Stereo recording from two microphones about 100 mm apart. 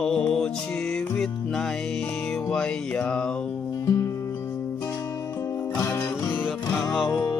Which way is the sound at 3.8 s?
30° left (ahead or behind).